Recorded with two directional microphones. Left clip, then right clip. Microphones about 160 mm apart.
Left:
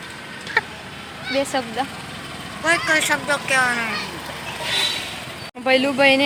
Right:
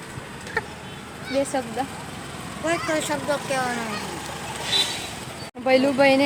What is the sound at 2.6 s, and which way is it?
Speech, 10° right (ahead or behind).